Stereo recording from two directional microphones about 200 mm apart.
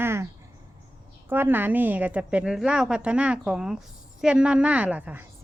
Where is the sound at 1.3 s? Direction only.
10° right (ahead or behind).